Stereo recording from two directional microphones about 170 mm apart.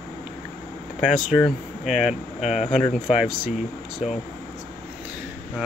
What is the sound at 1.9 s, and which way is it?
Speech, 40° left (ahead or behind).